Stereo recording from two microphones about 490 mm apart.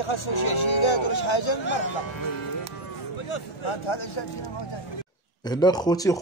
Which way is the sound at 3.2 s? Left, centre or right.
Left.